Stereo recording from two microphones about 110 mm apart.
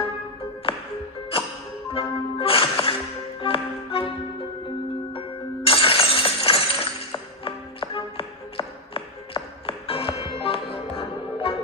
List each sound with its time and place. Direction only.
2.0 s music: 60° left (ahead or behind)
5.1 s music: 55° left (ahead or behind)